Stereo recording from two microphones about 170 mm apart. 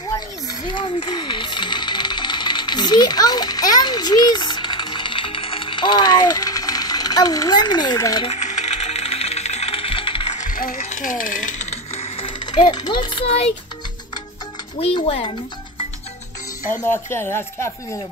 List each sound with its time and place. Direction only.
0.5 s coin: 30° left (ahead or behind)
8.3 s coin: 45° left (ahead or behind)
10.3 s gears: 50° left (ahead or behind)
10.8 s coin: 45° left (ahead or behind)
14.8 s speech: 35° left (ahead or behind)
16.8 s speech: 10° left (ahead or behind)